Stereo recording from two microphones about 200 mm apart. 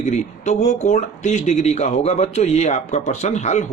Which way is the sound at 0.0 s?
35° left (ahead or behind).